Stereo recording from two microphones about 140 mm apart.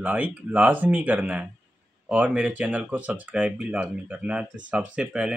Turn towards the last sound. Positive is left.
turn(degrees=-10)  # may be behind; listen again after turning